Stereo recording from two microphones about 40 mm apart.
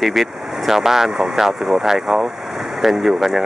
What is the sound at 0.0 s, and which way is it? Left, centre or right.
Speech, centre.